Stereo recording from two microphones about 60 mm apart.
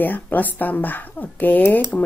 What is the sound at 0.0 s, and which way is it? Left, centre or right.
Speech, left.